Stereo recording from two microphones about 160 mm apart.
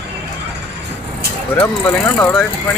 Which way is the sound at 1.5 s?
15° left (ahead or behind).